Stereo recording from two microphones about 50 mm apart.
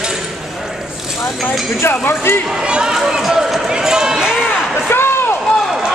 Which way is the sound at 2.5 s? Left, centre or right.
Centre.